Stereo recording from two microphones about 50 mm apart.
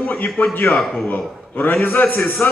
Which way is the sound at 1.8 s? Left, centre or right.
Left.